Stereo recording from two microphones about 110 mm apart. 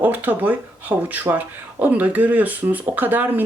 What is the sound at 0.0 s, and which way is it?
Speech, 15° right (ahead or behind).